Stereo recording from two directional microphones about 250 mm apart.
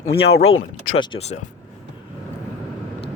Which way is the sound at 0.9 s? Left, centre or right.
Centre.